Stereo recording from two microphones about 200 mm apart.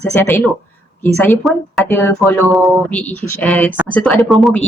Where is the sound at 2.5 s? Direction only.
Centre (ahead or behind).